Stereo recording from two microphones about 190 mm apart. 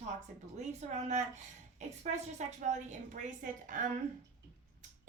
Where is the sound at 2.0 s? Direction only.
35° right (ahead or behind).